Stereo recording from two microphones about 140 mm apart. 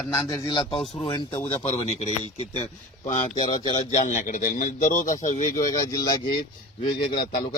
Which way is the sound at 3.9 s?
60° left (ahead or behind).